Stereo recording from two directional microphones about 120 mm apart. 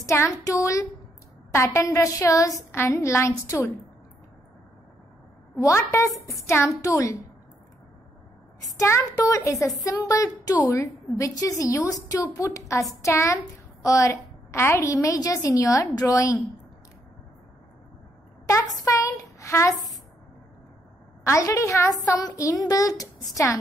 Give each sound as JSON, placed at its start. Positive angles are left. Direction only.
{"t": 0.0, "sound": "a woman's voice", "side_deg": 25}
{"t": 5.6, "sound": "a woman's voice", "side_deg": 25}
{"t": 8.6, "sound": "a woman's voice", "side_deg": 25}
{"t": 18.5, "sound": "speech", "side_deg": 30}
{"t": 21.2, "sound": "a woman's voice", "side_deg": 25}